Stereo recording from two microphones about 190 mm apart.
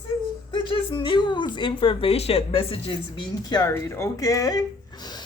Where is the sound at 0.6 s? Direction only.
25° left (ahead or behind).